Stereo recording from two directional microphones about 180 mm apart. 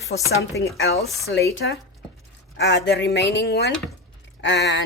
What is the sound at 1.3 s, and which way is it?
Speech, 70° left (ahead or behind).